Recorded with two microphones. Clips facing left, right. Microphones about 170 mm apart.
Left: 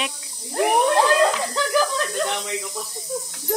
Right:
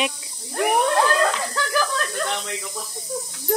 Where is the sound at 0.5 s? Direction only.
20° left (ahead or behind).